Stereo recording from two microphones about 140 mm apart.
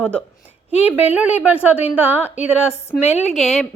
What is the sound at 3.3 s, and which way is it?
Speech, centre (ahead or behind).